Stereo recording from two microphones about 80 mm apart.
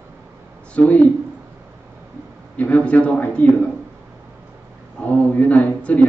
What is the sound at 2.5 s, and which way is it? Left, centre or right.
Speech, centre.